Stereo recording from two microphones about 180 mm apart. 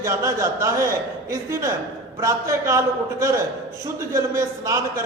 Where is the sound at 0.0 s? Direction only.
15° right (ahead or behind).